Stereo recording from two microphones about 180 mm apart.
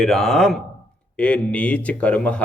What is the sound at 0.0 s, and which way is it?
A man's voice, centre (ahead or behind).